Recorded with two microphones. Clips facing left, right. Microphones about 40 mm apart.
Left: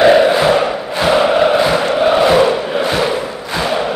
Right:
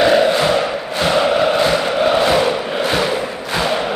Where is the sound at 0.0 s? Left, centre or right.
Centre.